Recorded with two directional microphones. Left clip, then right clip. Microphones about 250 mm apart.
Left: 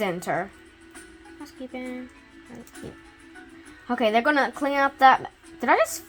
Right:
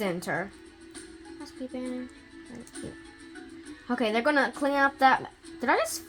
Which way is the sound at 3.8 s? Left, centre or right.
Left.